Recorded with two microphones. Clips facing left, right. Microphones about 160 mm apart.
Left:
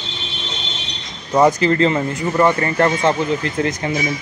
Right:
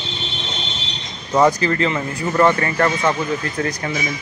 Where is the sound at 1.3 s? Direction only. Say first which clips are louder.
Left 2 dB; 20° left (ahead or behind).